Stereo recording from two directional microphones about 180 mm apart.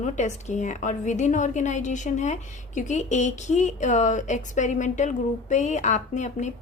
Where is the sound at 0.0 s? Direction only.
40° left (ahead or behind).